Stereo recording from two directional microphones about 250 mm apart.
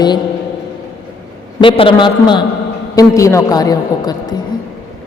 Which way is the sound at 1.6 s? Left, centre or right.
Centre.